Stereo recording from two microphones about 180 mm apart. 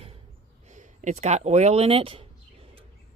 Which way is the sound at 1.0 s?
35° right (ahead or behind).